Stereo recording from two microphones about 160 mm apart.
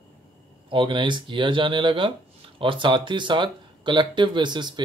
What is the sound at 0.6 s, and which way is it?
Speech, 30° right (ahead or behind).